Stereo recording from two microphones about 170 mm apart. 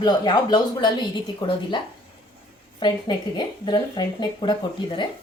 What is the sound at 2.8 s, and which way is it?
Speech, 25° left (ahead or behind).